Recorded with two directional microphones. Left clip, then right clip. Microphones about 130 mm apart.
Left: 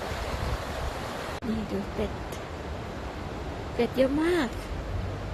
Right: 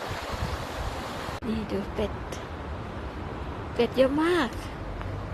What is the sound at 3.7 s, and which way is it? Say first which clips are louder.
Speech: right 2 dB; 20° left (ahead or behind).